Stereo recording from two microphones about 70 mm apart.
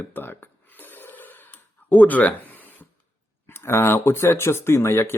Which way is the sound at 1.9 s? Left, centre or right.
Left.